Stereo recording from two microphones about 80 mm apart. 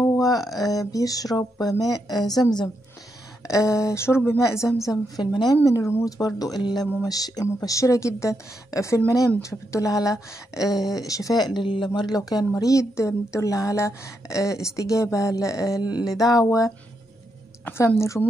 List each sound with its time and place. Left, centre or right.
0.1 s a sound: left
0.6 s a woman's voice: left
3.4 s a woman's voice: left
6.0 s a woman's voice: left
12.2 s speech: left
15.8 s a woman's voice: left